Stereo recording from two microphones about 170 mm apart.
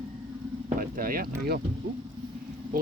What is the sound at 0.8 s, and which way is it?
Speech, 55° right (ahead or behind).